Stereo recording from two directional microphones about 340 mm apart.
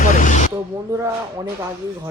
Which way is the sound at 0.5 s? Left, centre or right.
Centre.